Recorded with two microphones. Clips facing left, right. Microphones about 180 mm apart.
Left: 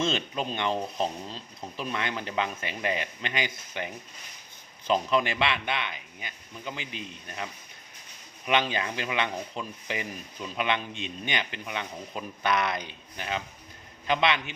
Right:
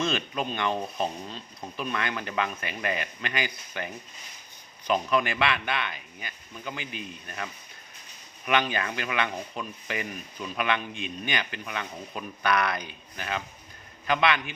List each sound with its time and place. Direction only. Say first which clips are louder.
0.0 s speech: even; 25° left (ahead or behind)